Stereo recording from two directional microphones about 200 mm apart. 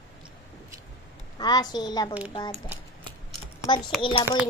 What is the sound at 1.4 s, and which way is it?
A child's voice, 20° left (ahead or behind).